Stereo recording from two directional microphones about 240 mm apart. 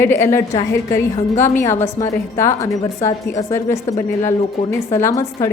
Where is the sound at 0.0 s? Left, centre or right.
Centre.